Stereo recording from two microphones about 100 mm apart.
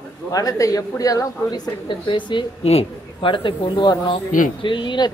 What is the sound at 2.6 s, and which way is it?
Speech, 85° left.